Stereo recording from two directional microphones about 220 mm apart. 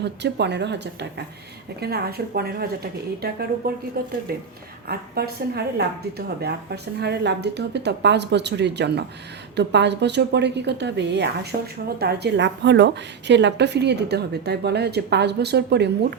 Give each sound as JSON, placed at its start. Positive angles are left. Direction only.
{"t": 0.0, "sound": "a woman's voice", "side_deg": -50}
{"t": 1.8, "sound": "a woman's voice", "side_deg": -45}
{"t": 4.9, "sound": "a woman's voice", "side_deg": -45}